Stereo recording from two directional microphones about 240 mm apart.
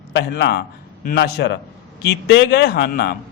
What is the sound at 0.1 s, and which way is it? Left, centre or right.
Speech, left.